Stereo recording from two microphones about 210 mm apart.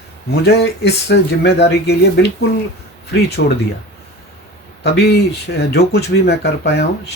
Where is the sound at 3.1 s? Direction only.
50° left (ahead or behind).